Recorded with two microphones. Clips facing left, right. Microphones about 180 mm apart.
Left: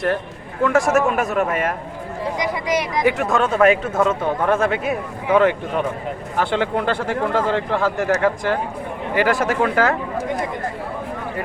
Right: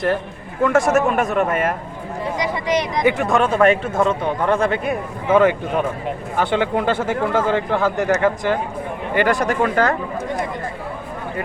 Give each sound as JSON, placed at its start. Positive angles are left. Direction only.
{"t": 0.6, "sound": "speech", "side_deg": 0}